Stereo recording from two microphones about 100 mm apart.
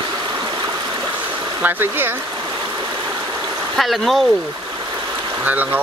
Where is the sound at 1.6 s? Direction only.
20° right (ahead or behind).